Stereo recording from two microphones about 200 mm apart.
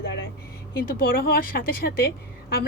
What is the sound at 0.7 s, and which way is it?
A woman's voice, 50° left (ahead or behind).